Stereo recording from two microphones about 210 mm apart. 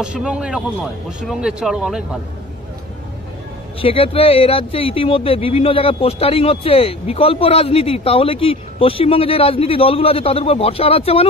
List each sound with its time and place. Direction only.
0.0 s speech: 5° right (ahead or behind)
3.8 s speech: 25° left (ahead or behind)